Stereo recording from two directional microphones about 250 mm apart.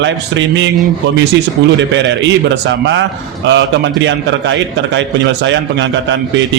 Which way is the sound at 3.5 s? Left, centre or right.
Right.